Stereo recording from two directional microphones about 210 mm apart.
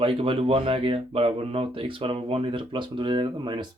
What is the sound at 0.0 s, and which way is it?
Speech, 25° right (ahead or behind).